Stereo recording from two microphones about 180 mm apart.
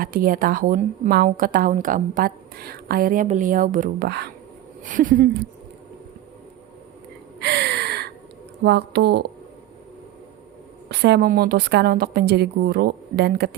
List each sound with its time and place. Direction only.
0.0 s a woman's voice: 50° right (ahead or behind)
7.3 s gasp: 70° right (ahead or behind)
8.6 s speech: 70° right (ahead or behind)
10.8 s a woman's voice: 70° right (ahead or behind)